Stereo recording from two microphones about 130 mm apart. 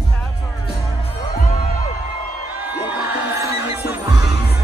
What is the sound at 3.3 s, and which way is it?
Music, 25° right (ahead or behind).